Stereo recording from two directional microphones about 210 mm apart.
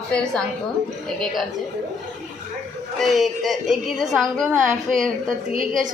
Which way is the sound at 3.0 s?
Centre (ahead or behind).